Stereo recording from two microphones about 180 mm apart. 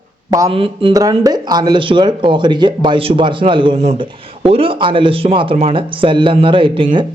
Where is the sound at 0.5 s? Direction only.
30° right (ahead or behind).